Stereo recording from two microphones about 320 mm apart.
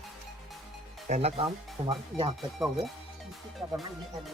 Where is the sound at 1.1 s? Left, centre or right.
Centre.